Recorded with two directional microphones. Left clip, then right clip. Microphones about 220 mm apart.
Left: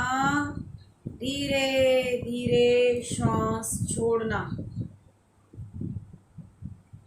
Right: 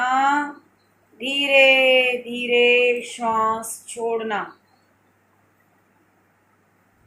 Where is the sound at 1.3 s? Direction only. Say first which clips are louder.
Right 12 dB; 30° left (ahead or behind).